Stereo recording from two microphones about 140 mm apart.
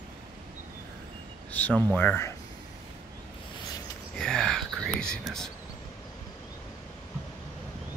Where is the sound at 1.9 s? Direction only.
15° left (ahead or behind).